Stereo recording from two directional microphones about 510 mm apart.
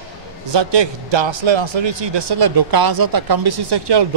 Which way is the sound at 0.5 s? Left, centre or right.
Right.